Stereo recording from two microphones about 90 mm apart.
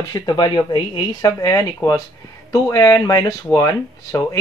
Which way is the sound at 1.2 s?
40° left (ahead or behind).